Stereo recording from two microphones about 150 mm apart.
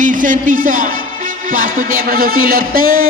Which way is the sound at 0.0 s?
60° right (ahead or behind).